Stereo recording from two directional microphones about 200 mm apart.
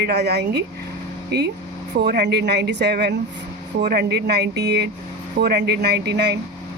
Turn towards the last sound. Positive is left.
turn(degrees=-55)  # may be behind; listen again after turning